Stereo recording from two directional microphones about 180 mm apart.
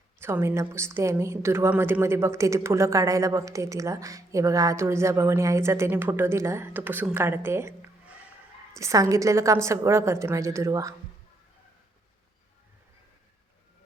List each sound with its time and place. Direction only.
0.2 s a woman's voice: 15° right (ahead or behind)